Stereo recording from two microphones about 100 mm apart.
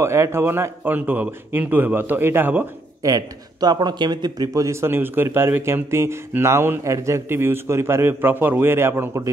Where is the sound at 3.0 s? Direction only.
40° right (ahead or behind).